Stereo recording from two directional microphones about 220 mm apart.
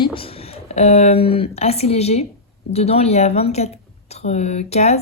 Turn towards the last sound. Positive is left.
turn(degrees=30)  # may be behind; listen again after turning